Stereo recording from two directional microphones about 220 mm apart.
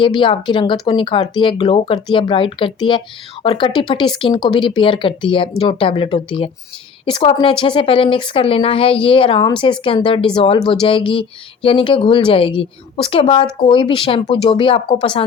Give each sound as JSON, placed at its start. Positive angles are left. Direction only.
{"t": 0.0, "sound": "speech", "side_deg": 20}